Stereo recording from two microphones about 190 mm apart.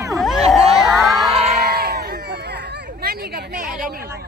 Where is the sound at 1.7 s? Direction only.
55° right (ahead or behind).